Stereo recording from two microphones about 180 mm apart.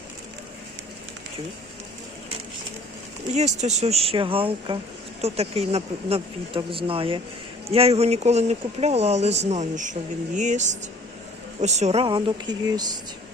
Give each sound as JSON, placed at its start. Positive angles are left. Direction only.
{"t": 3.3, "sound": "speech", "side_deg": -40}